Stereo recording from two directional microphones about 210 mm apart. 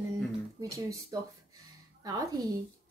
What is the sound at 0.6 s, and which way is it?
A woman's voice, 15° right (ahead or behind).